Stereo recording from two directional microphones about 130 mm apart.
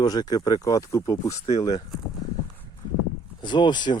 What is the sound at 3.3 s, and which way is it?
Speech, 35° left (ahead or behind).